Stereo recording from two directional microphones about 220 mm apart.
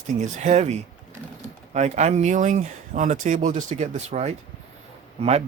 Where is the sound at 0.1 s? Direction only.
35° right (ahead or behind).